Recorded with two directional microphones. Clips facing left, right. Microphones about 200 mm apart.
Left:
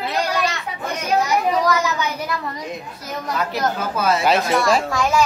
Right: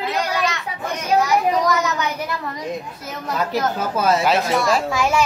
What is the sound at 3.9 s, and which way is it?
Speech, 40° right (ahead or behind).